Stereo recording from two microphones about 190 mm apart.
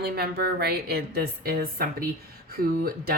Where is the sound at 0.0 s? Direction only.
55° right (ahead or behind).